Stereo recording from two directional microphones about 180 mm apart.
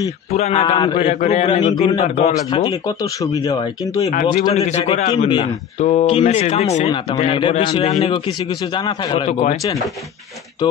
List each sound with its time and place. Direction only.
0.3 s a man's voice: 35° left (ahead or behind)
2.9 s a man's voice: 20° left (ahead or behind)
4.0 s a man's voice: 45° left (ahead or behind); by 9.3 s 30° left (ahead or behind)
9.3 s a man's voice: 40° left (ahead or behind)